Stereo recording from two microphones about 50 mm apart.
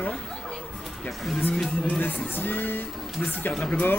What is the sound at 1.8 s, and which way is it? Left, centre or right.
Speech, left.